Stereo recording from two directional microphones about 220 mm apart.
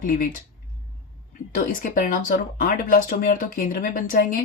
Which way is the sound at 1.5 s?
40° left (ahead or behind).